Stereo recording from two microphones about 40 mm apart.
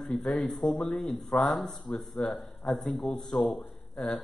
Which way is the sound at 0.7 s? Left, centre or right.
Left.